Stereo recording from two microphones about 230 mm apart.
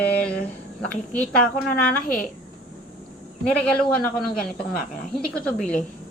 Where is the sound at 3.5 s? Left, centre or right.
Centre.